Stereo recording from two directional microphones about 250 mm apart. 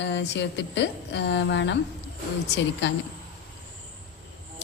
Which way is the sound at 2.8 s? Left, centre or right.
Left.